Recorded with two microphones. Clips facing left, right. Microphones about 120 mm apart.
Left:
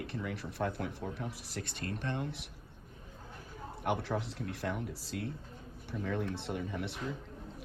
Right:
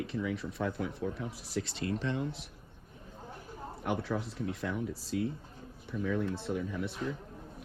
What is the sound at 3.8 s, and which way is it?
Speech, 60° left (ahead or behind).